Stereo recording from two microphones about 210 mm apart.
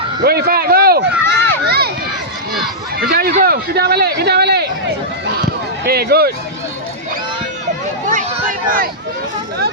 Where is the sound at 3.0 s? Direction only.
45° right (ahead or behind).